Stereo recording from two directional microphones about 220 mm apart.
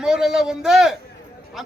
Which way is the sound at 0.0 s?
Centre (ahead or behind).